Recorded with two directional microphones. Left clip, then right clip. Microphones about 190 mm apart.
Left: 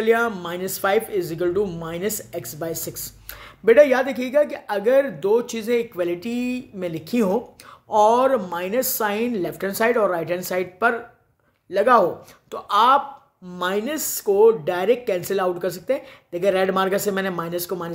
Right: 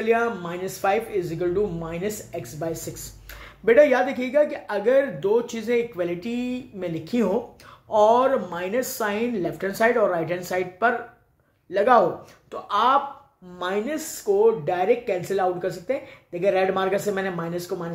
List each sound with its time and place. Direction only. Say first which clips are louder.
0.0 s speech: left 3 dB; 45° left (ahead or behind)